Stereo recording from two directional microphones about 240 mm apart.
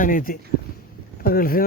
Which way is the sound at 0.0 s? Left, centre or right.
Left.